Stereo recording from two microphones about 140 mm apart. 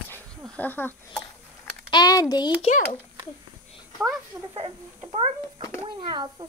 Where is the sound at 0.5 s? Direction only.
15° left (ahead or behind).